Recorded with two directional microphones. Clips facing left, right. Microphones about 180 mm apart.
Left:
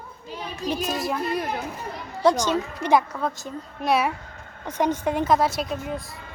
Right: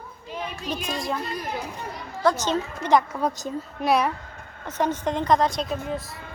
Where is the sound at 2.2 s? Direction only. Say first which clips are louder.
Left 2 dB; 10° left (ahead or behind).